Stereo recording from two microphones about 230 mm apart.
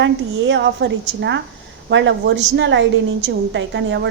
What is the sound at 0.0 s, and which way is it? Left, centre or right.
A woman's voice, right.